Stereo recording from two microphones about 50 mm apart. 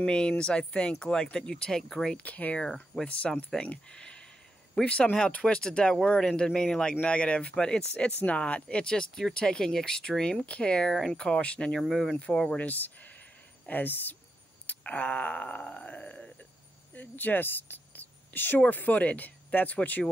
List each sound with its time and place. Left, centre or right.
0.0 s speech: centre
2.1 s speech: left
2.6 s speech: centre
3.3 s speech: left
11.8 s speech: centre
12.5 s speech: left
13.7 s groan: left
16.9 s speech: left
18.6 s groan: left